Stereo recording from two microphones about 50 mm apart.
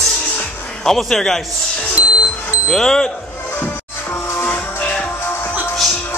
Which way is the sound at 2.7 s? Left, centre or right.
Centre.